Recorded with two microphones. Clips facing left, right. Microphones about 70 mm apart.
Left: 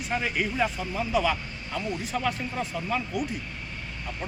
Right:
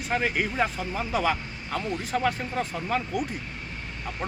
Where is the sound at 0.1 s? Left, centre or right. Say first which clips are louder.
Right 2 dB; right.